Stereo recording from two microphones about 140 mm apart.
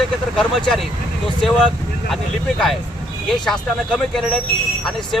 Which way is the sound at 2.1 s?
5° left (ahead or behind).